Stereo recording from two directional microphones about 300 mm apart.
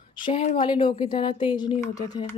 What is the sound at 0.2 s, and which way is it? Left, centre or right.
Speech, centre.